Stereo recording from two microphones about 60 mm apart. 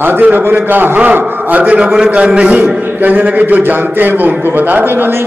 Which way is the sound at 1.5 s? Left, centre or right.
Centre.